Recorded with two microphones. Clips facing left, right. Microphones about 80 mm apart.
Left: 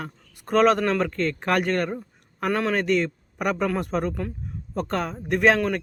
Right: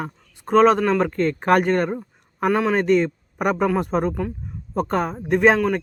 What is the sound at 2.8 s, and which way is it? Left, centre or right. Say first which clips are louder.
Speech: right 5 dB; right.